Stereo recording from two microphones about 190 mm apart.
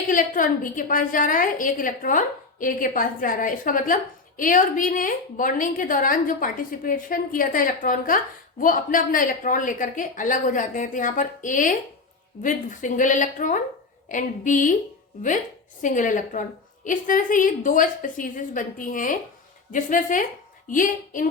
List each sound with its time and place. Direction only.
0.1 s a woman's voice: 45° left (ahead or behind)
15.8 s a woman's voice: 45° left (ahead or behind)